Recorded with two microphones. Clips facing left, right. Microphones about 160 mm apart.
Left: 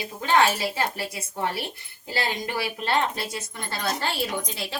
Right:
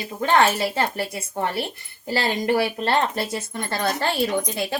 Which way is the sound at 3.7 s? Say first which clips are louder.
Right 4 dB; 55° right (ahead or behind).